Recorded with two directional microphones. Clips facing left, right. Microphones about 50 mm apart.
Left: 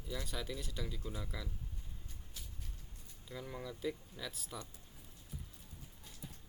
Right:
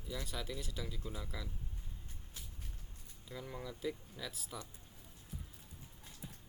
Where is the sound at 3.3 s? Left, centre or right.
Centre.